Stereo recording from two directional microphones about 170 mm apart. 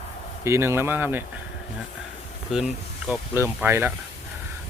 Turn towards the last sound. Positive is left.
turn(degrees=-15)  # may be behind; listen again after turning